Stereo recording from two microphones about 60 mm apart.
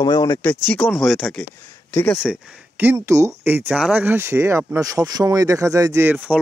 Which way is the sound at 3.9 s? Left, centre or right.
Right.